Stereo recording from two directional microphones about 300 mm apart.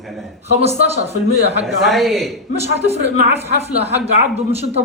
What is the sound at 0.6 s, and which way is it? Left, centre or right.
Speech, right.